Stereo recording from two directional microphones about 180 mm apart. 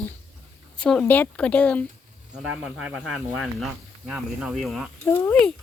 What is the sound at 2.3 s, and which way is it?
Speech, 5° right (ahead or behind).